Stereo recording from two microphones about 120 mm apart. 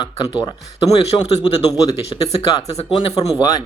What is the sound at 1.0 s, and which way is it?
Speech, 60° left (ahead or behind).